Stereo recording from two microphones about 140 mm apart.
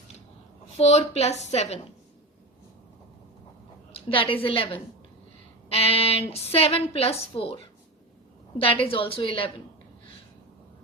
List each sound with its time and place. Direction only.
0.8 s a woman's voice: 50° left (ahead or behind)
3.9 s a woman's voice: 40° left (ahead or behind)